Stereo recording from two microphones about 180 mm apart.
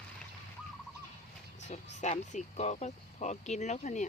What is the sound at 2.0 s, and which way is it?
Speech, 40° left (ahead or behind).